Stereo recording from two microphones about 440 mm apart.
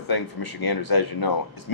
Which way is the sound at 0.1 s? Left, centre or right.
Left.